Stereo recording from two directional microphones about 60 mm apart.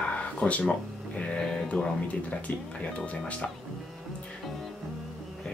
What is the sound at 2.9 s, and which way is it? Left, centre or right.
Speech, left.